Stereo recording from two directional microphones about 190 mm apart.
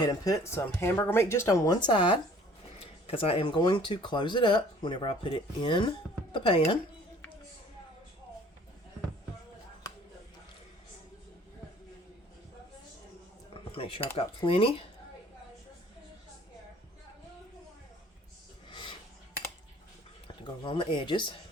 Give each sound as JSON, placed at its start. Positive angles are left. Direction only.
{"t": 0.0, "sound": "speech", "side_deg": 20}
{"t": 13.5, "sound": "cutlery", "side_deg": 30}
{"t": 14.2, "sound": "speech", "side_deg": 30}
{"t": 18.7, "sound": "a sound", "side_deg": 25}
{"t": 20.2, "sound": "speech", "side_deg": 25}